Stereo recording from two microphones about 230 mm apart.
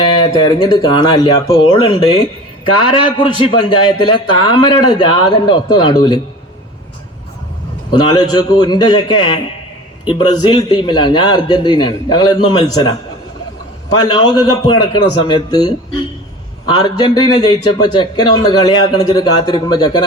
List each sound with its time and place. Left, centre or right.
0.0 s a man's voice: centre
3.2 s a man's voice: left
7.9 s a man's voice: centre
16.7 s speech: centre